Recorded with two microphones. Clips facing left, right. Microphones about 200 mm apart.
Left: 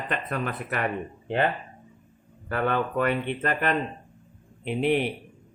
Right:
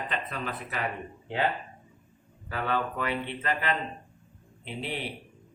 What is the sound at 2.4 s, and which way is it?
Speech, 55° left (ahead or behind).